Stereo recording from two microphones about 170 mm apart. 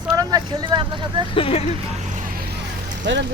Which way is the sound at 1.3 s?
35° left (ahead or behind).